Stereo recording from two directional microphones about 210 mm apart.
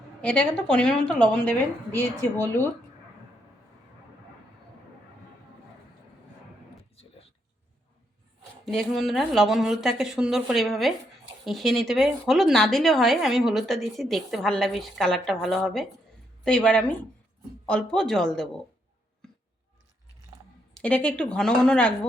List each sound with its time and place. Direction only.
0.2 s a woman's voice: 5° left (ahead or behind)
8.6 s a woman's voice: centre (ahead or behind)
19.2 s a sound: 5° left (ahead or behind)
20.7 s a woman's voice: 5° left (ahead or behind)